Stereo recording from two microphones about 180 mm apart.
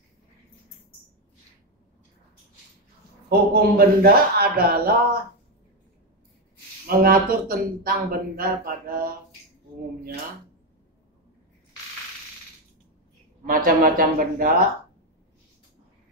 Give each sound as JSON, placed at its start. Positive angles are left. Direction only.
{"t": 3.3, "sound": "speech", "side_deg": -55}
{"t": 6.9, "sound": "speech", "side_deg": -55}
{"t": 13.5, "sound": "speech", "side_deg": -50}